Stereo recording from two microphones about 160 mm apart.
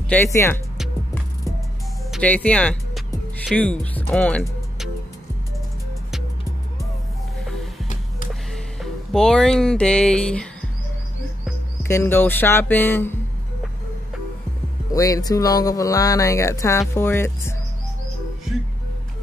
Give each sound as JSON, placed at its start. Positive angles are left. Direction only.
{"t": 0.1, "sound": "speech", "side_deg": 15}
{"t": 2.2, "sound": "speech", "side_deg": 10}
{"t": 9.1, "sound": "speech", "side_deg": 5}
{"t": 11.8, "sound": "speech", "side_deg": 15}
{"t": 14.9, "sound": "speech", "side_deg": 20}